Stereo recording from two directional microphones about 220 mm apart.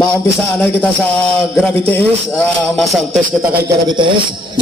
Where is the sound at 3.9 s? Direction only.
20° right (ahead or behind).